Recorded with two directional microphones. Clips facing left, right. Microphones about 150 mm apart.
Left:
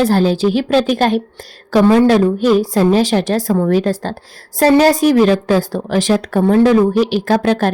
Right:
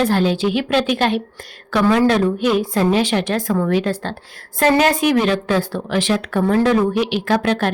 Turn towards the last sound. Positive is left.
turn(degrees=40)  # may be behind; listen again after turning